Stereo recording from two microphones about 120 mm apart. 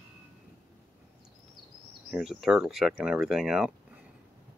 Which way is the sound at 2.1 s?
Centre (ahead or behind).